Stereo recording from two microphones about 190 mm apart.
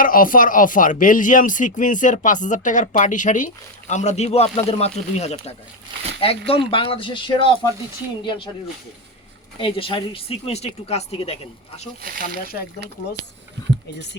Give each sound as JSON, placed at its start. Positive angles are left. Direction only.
{"t": 0.0, "sound": "speech", "side_deg": 45}
{"t": 9.6, "sound": "speech", "side_deg": 30}